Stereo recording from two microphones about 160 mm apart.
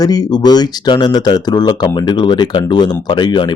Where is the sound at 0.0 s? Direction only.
25° left (ahead or behind).